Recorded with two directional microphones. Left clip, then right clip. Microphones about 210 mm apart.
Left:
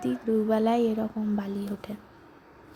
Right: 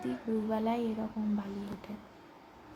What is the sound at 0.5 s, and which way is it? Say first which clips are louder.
A woman's voice: left 9 dB; 25° left (ahead or behind).